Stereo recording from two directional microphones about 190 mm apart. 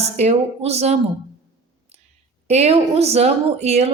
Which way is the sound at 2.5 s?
35° right (ahead or behind).